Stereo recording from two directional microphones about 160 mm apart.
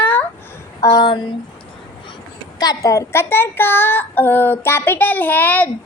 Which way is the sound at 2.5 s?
25° left (ahead or behind).